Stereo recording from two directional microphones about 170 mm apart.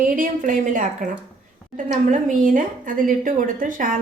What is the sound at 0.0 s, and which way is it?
A woman's voice, 50° right (ahead or behind).